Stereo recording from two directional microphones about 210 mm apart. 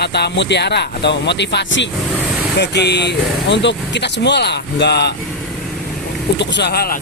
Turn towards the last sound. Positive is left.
turn(degrees=45)  # may be behind; listen again after turning